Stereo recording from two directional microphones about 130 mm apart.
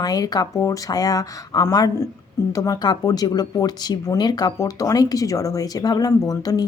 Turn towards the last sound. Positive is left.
turn(degrees=30)  # may be behind; listen again after turning